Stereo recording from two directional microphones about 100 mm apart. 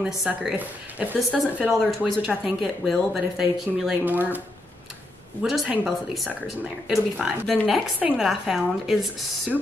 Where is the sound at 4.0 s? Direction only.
20° right (ahead or behind).